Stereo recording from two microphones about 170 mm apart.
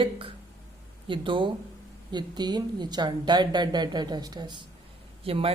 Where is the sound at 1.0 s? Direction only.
30° right (ahead or behind).